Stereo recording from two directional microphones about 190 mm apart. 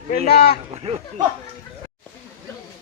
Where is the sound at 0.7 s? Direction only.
30° right (ahead or behind).